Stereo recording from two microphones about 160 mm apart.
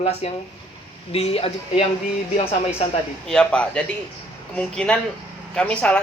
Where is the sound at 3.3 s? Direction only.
5° left (ahead or behind).